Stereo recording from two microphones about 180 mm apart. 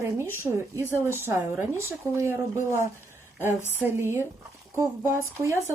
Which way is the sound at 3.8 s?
10° right (ahead or behind).